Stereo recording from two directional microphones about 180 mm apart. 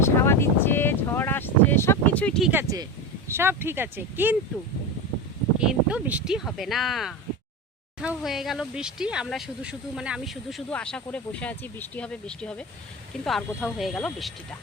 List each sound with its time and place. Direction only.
0.0 s speech: 15° left (ahead or behind)
2.5 s speech: 15° right (ahead or behind)
5.5 s speech: 5° right (ahead or behind)